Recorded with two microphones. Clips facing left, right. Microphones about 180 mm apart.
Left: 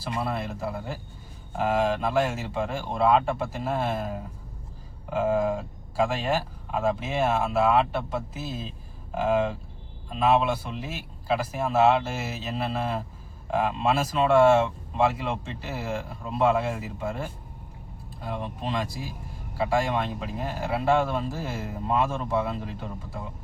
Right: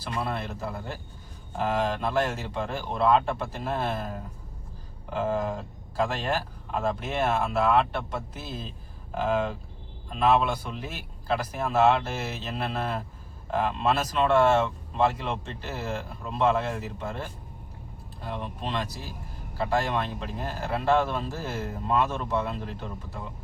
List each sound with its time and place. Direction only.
0.0 s speech: 5° left (ahead or behind)